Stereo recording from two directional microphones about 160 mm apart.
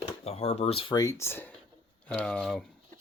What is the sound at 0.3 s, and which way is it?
Speech, 40° left (ahead or behind).